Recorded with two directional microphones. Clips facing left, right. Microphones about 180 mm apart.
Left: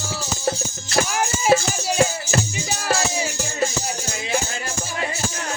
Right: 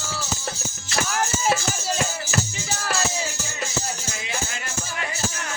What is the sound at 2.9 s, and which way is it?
Music, 15° left (ahead or behind).